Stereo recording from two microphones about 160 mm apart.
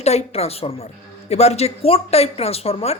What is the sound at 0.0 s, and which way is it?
Speech, 40° left (ahead or behind).